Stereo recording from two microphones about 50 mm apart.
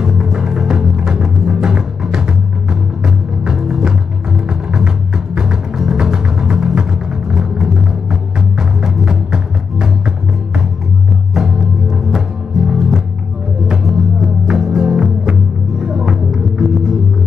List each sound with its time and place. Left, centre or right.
0.0 s music: centre